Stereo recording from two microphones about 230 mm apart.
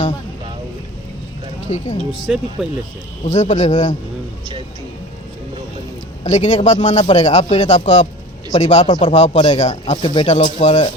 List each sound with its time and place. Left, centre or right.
1.6 s speech: left
2.2 s speech: centre
3.3 s a man's voice: left
6.2 s speech: left